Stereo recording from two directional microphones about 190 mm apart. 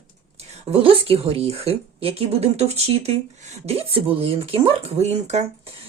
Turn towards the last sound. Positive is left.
turn(degrees=-35)  # may be behind; listen again after turning